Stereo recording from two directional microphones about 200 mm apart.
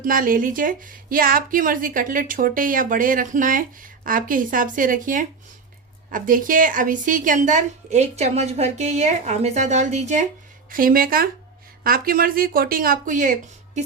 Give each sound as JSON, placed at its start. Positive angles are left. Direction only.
{"t": 0.0, "sound": "a woman's voice", "side_deg": -45}